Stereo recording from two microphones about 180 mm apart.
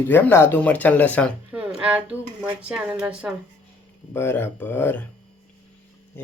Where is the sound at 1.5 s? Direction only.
10° right (ahead or behind).